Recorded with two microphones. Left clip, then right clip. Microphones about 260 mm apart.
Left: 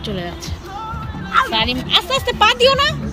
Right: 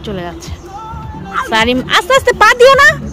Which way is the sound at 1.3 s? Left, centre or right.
Centre.